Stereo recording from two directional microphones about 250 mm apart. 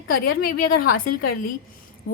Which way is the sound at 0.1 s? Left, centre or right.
Left.